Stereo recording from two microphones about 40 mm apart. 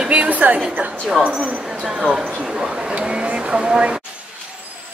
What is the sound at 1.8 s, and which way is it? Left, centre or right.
Speech, centre.